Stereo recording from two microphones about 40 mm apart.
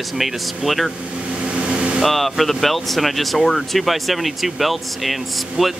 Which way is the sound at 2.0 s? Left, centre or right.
Centre.